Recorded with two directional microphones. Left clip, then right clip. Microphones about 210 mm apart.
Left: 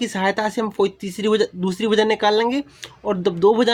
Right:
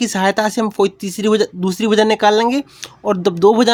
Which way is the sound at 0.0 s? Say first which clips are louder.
Right 5 dB; 30° right (ahead or behind).